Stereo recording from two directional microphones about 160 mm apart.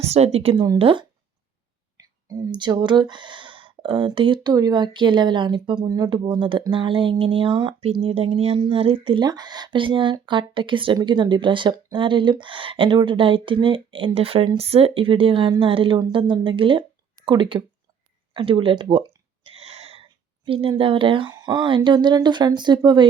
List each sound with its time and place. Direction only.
0.1 s speech: 40° right (ahead or behind)